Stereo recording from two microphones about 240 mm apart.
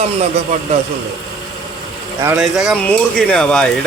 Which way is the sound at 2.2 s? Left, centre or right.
Centre.